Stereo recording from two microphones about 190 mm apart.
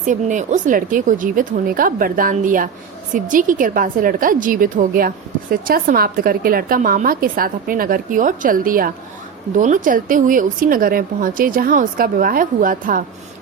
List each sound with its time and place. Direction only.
0.0 s a woman's voice: 40° right (ahead or behind)